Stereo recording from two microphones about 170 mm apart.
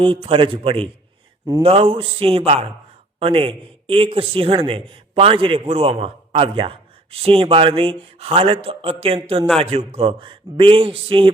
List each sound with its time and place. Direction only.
0.0 s a man's voice: 30° right (ahead or behind)